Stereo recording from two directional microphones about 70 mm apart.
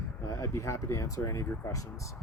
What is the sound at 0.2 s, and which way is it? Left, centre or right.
Speech, left.